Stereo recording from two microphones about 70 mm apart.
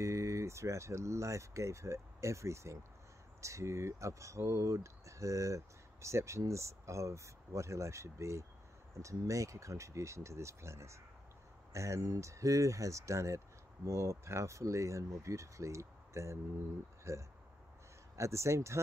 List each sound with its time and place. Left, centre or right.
0.0 s speech: right